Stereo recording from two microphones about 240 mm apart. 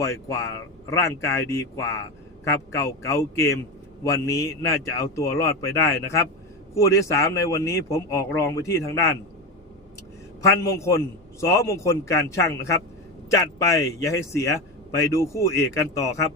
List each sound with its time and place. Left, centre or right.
0.0 s speech: centre
10.4 s speech: centre